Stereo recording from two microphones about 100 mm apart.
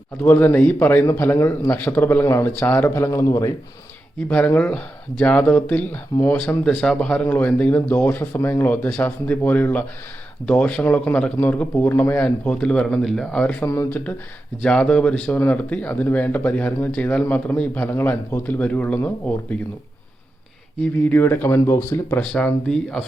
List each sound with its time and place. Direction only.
0.2 s a man's voice: 20° left (ahead or behind)
4.3 s speech: 15° left (ahead or behind)
13.6 s a man's voice: 25° left (ahead or behind)
14.6 s speech: 10° left (ahead or behind)
21.0 s a man's voice: 20° left (ahead or behind)
22.2 s speech: 10° left (ahead or behind)